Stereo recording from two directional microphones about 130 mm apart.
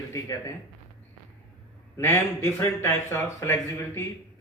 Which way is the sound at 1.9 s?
20° left (ahead or behind).